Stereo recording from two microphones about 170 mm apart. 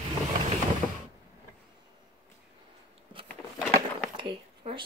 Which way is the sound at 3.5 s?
Centre (ahead or behind).